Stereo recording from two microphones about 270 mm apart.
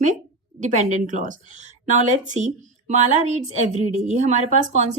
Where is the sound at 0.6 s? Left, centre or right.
Right.